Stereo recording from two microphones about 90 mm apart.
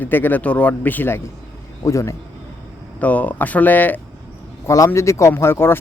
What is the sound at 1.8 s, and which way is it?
Speech, 35° left (ahead or behind).